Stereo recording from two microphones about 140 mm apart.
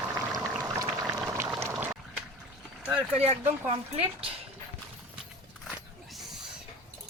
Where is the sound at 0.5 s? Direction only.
25° right (ahead or behind).